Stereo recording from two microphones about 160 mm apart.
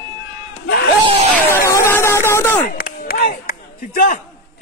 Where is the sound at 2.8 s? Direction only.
65° left (ahead or behind).